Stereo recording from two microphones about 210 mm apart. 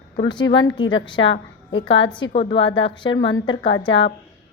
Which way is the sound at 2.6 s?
60° left (ahead or behind).